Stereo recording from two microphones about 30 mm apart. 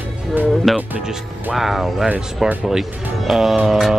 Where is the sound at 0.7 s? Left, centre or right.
Centre.